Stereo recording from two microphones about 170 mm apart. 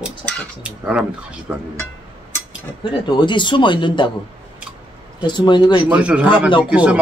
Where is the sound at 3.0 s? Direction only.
25° left (ahead or behind).